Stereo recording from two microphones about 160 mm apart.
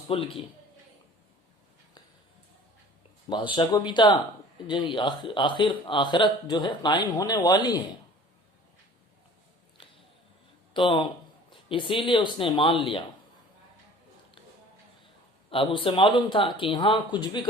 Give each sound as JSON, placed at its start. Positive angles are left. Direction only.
{"t": 0.1, "sound": "speech", "side_deg": 35}
{"t": 3.2, "sound": "speech", "side_deg": 30}
{"t": 10.8, "sound": "speech", "side_deg": 30}
{"t": 15.4, "sound": "speech", "side_deg": 35}